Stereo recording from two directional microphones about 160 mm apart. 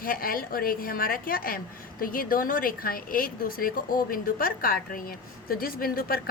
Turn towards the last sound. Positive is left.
turn(degrees=65)  # may be behind; listen again after turning